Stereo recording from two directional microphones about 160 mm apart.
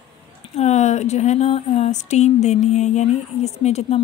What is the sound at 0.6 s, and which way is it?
A woman's voice, 45° left (ahead or behind).